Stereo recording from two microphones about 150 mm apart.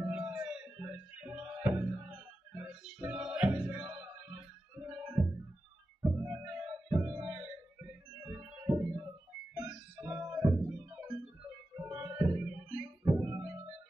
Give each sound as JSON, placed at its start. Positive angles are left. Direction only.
{"t": 0.0, "sound": "music", "side_deg": -5}
{"t": 11.0, "sound": "organ", "side_deg": -5}
{"t": 12.0, "sound": "music", "side_deg": -15}